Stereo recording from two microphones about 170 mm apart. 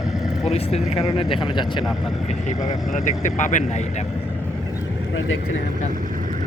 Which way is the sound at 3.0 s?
45° left (ahead or behind).